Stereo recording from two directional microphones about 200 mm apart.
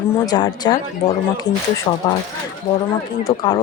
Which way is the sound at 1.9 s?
20° left (ahead or behind).